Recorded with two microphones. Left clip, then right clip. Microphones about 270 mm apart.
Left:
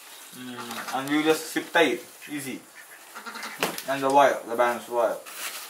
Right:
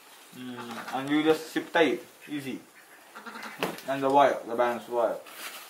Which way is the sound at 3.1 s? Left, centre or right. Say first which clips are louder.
Left 4 dB; centre.